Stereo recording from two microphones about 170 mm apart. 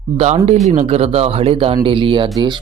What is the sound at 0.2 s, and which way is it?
Speech, 40° right (ahead or behind).